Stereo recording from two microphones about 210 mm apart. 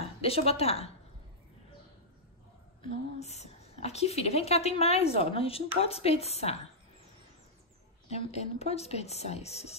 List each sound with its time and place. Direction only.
0.2 s a woman's voice: 30° left (ahead or behind)
2.8 s a woman's voice: 30° left (ahead or behind)
8.1 s speech: 30° left (ahead or behind)